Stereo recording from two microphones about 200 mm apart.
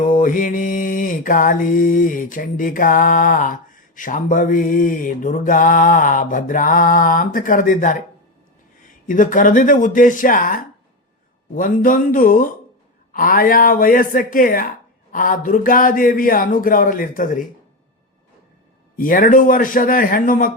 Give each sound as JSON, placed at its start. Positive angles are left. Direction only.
{"t": 0.0, "sound": "mantra", "side_deg": 40}
{"t": 9.0, "sound": "speech", "side_deg": 40}
{"t": 11.5, "sound": "mantra", "side_deg": 45}
{"t": 18.9, "sound": "mantra", "side_deg": 45}